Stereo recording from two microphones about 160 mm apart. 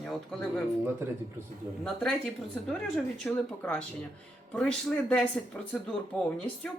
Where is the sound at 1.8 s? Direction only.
5° left (ahead or behind).